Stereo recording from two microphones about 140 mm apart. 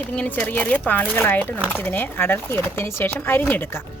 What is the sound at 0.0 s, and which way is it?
Speech, 10° left (ahead or behind).